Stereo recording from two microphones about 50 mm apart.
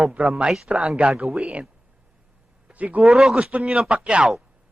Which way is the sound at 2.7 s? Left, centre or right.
Right.